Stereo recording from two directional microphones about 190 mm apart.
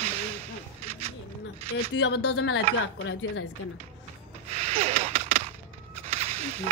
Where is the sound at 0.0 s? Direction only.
35° right (ahead or behind).